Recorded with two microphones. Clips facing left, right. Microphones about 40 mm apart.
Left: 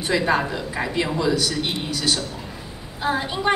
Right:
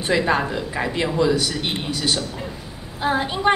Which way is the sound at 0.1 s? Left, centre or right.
Centre.